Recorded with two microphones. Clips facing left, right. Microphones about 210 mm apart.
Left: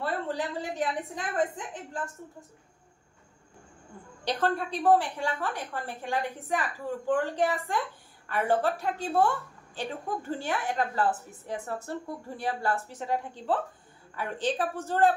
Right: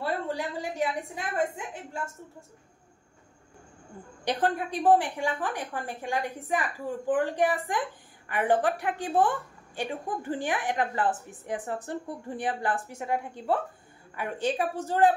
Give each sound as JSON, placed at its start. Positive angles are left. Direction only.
{"t": 0.0, "sound": "a woman's voice", "side_deg": -10}
{"t": 4.2, "sound": "a woman's voice", "side_deg": -15}
{"t": 14.6, "sound": "a woman's voice", "side_deg": -15}